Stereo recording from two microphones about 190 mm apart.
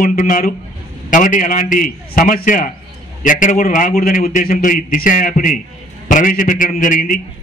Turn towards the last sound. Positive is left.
turn(degrees=45)  # may be behind; listen again after turning